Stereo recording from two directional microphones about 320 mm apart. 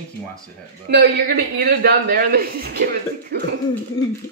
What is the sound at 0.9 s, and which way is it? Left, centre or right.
A man's voice, right.